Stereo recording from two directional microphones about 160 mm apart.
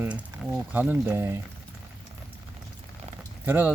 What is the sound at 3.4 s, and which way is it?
Speech, 10° right (ahead or behind).